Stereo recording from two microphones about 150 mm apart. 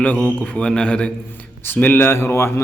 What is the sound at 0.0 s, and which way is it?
A man's voice, 10° left (ahead or behind).